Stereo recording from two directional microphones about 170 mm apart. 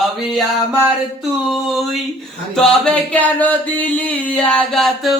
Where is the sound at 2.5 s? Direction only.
Centre (ahead or behind).